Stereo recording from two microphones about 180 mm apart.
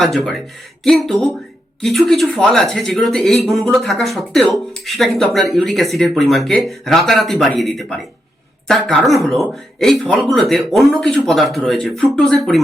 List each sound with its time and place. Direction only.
0.0 s speech: 5° left (ahead or behind)